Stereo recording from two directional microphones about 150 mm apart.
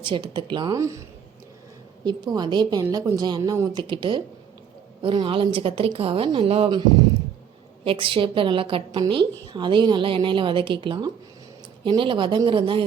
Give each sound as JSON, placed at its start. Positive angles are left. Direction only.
{"t": 0.0, "sound": "a woman's voice", "side_deg": -35}
{"t": 2.0, "sound": "a woman's voice", "side_deg": -25}
{"t": 7.9, "sound": "a woman's voice", "side_deg": -35}